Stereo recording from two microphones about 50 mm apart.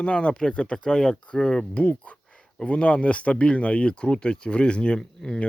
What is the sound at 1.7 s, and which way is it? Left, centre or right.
Speech, left.